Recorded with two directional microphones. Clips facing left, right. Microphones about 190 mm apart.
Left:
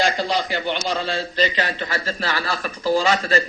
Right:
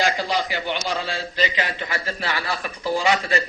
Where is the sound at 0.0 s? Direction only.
10° right (ahead or behind).